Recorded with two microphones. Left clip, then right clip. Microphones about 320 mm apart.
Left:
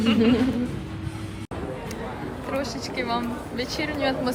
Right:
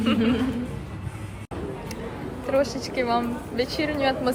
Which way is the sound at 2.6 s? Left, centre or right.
Left.